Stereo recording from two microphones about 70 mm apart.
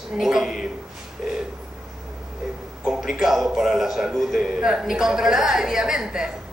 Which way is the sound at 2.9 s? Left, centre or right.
Centre.